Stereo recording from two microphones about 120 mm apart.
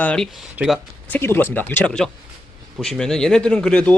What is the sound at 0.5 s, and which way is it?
Speech, 5° right (ahead or behind).